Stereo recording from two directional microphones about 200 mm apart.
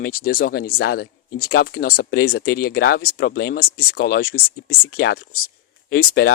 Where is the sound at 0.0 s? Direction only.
45° left (ahead or behind).